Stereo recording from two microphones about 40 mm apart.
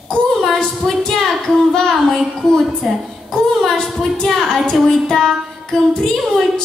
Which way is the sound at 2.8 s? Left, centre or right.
Centre.